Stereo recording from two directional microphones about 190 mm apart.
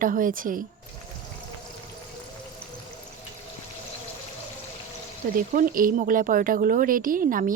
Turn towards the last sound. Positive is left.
turn(degrees=-45)  # may be behind; listen again after turning